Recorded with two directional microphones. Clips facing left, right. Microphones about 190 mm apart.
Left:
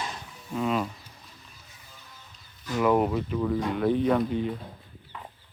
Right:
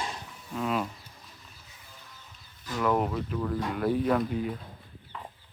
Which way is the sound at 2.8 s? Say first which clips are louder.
Left 4 dB; 10° left (ahead or behind).